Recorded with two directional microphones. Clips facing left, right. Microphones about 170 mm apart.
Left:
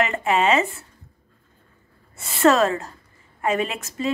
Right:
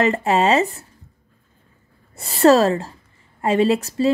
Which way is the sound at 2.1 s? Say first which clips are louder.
Right 4 dB; 35° right (ahead or behind).